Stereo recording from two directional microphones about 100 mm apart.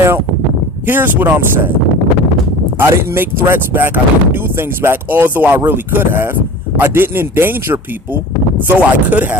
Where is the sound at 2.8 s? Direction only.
25° right (ahead or behind).